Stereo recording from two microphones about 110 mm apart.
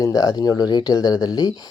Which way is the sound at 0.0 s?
30° left (ahead or behind).